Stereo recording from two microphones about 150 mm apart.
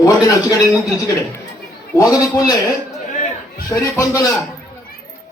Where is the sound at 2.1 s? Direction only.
25° left (ahead or behind).